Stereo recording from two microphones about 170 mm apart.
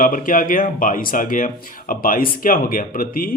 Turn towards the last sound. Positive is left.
turn(degrees=55)  # may be behind; listen again after turning